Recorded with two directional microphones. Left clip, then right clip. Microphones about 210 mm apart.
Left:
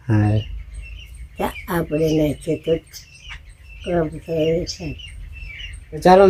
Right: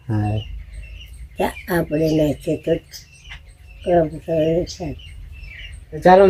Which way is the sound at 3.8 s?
10° left (ahead or behind).